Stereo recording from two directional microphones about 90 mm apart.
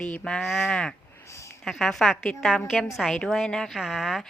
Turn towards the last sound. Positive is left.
turn(degrees=-5)  # may be behind; listen again after turning